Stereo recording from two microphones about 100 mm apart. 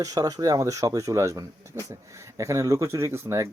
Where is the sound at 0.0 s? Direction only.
35° right (ahead or behind).